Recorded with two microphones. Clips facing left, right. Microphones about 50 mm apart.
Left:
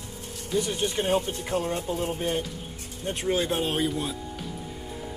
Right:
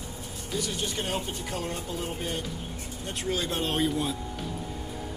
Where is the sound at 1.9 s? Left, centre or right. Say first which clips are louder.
Left 5 dB; left.